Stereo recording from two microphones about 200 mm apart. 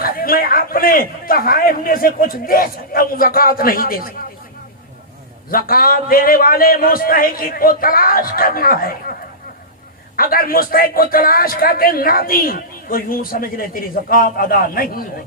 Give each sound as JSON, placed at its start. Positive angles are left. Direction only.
{"t": 0.0, "sound": "speech", "side_deg": 45}
{"t": 5.5, "sound": "speech", "side_deg": 45}
{"t": 10.2, "sound": "speech", "side_deg": 45}